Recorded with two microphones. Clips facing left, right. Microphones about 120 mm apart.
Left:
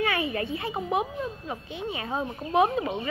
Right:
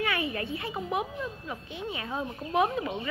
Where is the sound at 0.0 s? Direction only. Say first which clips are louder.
Left 3 dB; 25° left (ahead or behind).